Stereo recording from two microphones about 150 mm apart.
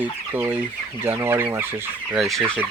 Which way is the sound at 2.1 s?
Centre (ahead or behind).